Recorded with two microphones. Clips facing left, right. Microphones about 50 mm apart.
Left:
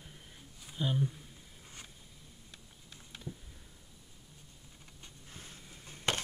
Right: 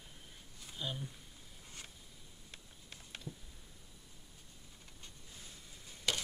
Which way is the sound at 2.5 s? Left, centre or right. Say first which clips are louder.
Right 3 dB; right.